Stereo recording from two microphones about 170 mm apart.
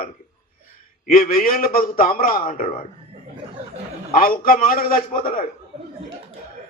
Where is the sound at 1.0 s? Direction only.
60° left (ahead or behind).